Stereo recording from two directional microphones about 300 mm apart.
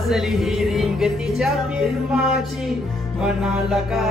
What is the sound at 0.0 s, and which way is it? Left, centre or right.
Music, centre.